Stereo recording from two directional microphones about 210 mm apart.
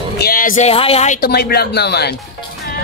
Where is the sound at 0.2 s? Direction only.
40° left (ahead or behind).